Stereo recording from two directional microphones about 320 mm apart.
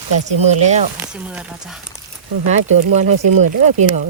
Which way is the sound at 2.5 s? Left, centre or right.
Right.